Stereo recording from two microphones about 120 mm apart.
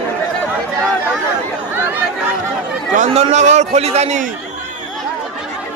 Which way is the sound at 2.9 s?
75° right (ahead or behind).